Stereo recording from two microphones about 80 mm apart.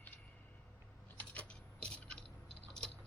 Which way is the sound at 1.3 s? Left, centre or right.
Centre.